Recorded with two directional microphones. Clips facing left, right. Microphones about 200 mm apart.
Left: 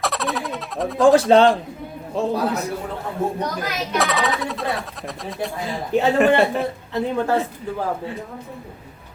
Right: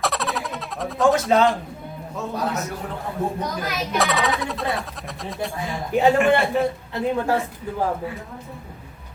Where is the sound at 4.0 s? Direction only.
Centre (ahead or behind).